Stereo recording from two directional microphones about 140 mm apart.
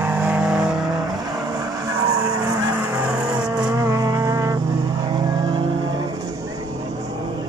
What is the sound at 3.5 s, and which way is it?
Vehicle, 25° right (ahead or behind).